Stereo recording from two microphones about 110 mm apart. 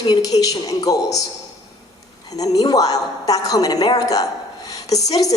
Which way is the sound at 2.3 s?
35° left (ahead or behind).